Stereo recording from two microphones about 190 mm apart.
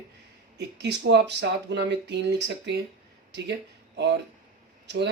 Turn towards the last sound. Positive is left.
turn(degrees=-65)  # may be behind; listen again after turning